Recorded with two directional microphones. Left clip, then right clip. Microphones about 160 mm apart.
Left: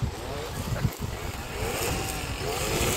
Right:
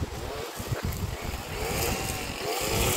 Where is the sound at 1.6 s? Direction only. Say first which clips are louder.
Even; 20° right (ahead or behind).